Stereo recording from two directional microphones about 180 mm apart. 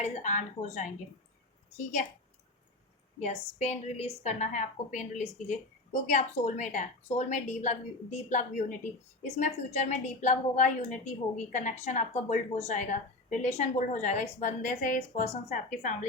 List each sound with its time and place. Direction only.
0.0 s a woman's voice: 45° left (ahead or behind)
3.2 s a woman's voice: 40° left (ahead or behind)